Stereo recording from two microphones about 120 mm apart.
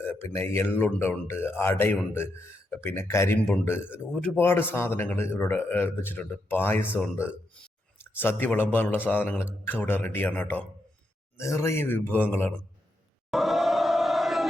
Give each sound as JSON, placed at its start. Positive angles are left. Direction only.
{"t": 0.0, "sound": "a man's voice", "side_deg": 20}
{"t": 11.3, "sound": "a man's voice", "side_deg": 25}
{"t": 13.3, "sound": "crowd", "side_deg": 0}